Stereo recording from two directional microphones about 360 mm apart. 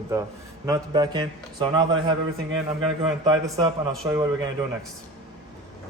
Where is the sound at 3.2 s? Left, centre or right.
Centre.